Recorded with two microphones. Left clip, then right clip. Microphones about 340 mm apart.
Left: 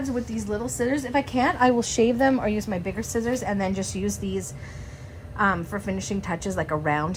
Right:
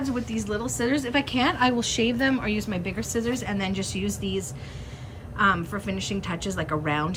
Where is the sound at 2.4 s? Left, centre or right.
Left.